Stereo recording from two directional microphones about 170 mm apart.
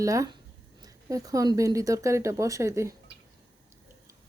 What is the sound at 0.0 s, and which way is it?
Speech, 20° right (ahead or behind).